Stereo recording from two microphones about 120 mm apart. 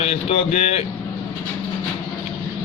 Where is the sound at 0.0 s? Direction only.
55° left (ahead or behind).